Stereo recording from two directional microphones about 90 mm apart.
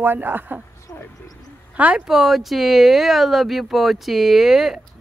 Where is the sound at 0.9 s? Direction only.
35° left (ahead or behind).